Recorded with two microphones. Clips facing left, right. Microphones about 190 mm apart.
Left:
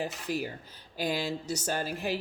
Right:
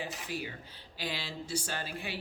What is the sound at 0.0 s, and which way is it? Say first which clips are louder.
A man's voice: left 6 dB; 40° left (ahead or behind).